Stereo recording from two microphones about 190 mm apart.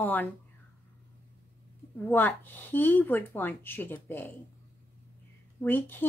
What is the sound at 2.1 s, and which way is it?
Speech, 10° left (ahead or behind).